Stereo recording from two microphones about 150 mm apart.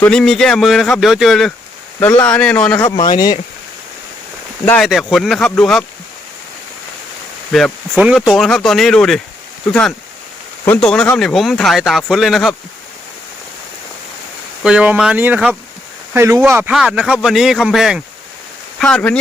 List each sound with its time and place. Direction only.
0.0 s speech: 5° left (ahead or behind)
2.8 s speech: 25° left (ahead or behind)
4.8 s speech: centre (ahead or behind)
7.5 s speech: 5° right (ahead or behind)
10.7 s speech: 5° left (ahead or behind)
14.6 s speech: 5° right (ahead or behind)
16.7 s speech: 5° right (ahead or behind)